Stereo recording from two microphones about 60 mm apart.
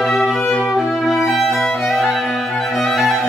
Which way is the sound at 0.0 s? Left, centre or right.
Centre.